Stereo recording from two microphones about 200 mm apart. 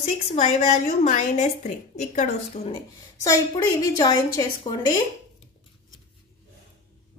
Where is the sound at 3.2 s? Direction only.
15° left (ahead or behind).